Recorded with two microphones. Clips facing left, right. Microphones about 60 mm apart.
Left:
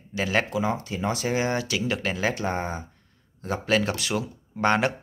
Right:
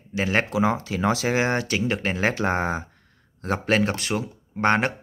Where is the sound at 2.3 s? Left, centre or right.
Right.